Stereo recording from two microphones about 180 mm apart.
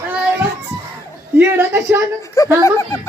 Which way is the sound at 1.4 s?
10° right (ahead or behind).